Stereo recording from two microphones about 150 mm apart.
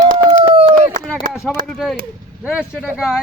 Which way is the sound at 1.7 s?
Centre (ahead or behind).